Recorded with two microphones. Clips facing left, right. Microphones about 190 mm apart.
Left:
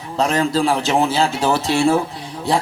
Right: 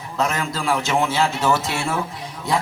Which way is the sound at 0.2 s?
30° left (ahead or behind).